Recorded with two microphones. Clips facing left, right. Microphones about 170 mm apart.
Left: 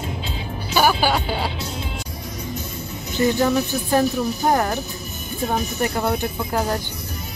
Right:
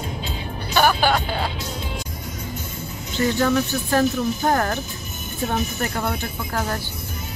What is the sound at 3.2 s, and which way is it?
Speech, 15° left (ahead or behind).